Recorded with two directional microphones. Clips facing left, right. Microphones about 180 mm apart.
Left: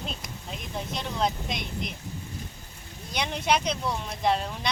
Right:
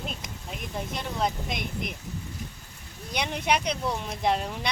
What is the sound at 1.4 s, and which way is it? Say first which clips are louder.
Speech: right 1 dB; 55° right (ahead or behind).